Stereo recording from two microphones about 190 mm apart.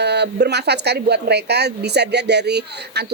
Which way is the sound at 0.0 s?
60° right (ahead or behind).